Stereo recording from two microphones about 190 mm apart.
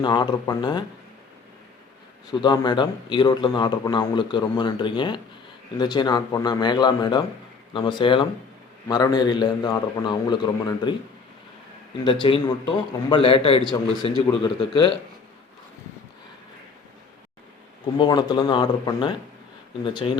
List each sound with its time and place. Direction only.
0.0 s a man's voice: 25° left (ahead or behind)
2.3 s a man's voice: 25° left (ahead or behind)
12.0 s a man's voice: 25° left (ahead or behind)
17.9 s a man's voice: 25° left (ahead or behind)